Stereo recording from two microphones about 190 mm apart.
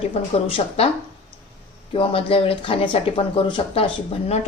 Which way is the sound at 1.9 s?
30° left (ahead or behind).